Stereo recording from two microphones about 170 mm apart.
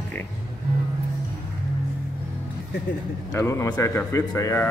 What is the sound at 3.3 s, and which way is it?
Speech, 15° left (ahead or behind).